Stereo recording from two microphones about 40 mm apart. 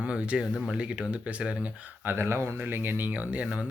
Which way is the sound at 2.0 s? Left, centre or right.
Right.